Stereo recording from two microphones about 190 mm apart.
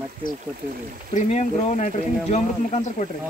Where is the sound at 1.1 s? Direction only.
40° left (ahead or behind).